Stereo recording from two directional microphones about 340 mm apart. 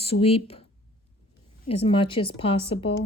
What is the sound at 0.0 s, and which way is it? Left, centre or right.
A woman's voice, centre.